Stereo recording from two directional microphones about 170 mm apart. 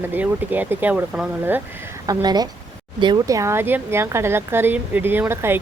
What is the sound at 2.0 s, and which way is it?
Speech, 25° right (ahead or behind).